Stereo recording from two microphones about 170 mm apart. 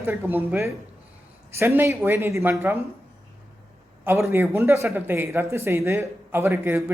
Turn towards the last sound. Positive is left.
turn(degrees=-15)  # may be behind; listen again after turning